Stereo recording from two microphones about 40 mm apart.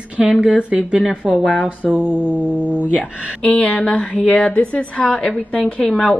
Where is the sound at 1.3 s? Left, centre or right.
Left.